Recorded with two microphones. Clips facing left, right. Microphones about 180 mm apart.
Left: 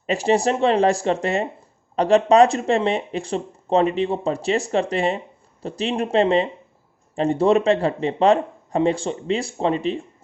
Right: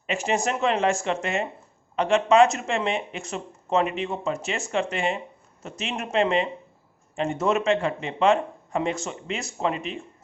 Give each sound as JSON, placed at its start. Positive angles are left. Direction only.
{"t": 0.1, "sound": "speech", "side_deg": 35}